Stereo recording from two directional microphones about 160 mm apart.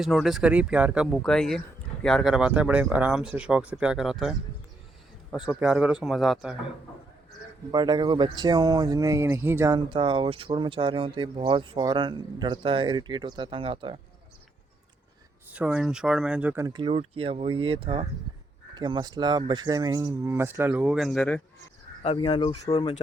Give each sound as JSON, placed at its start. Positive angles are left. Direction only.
{"t": 0.0, "sound": "speech", "side_deg": 0}
{"t": 1.1, "sound": "speech", "side_deg": 5}
{"t": 5.5, "sound": "speech", "side_deg": -5}
{"t": 7.7, "sound": "speech", "side_deg": -25}
{"t": 15.5, "sound": "speech", "side_deg": -10}
{"t": 16.7, "sound": "speech", "side_deg": -35}
{"t": 22.1, "sound": "speech", "side_deg": 30}